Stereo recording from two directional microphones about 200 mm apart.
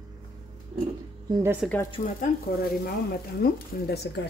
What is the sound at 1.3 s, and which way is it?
Speech, 15° right (ahead or behind).